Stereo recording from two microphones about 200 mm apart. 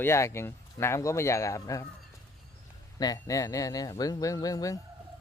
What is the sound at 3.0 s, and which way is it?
Speech, 15° left (ahead or behind).